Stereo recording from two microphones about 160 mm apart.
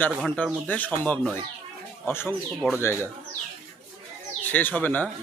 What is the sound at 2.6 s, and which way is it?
Speech, centre (ahead or behind).